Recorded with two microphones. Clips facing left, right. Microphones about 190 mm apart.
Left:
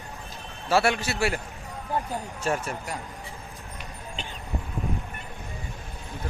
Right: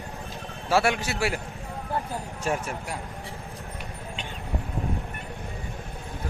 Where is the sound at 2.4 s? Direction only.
10° right (ahead or behind).